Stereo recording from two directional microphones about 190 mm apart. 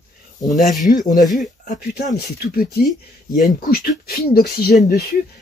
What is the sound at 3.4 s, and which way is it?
Speech, 50° left (ahead or behind).